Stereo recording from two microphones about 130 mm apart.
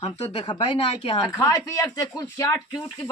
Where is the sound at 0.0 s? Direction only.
40° left (ahead or behind).